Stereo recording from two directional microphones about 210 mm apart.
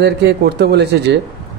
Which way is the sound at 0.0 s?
55° right (ahead or behind).